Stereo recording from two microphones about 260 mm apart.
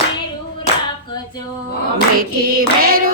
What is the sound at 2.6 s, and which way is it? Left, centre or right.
Clapping, right.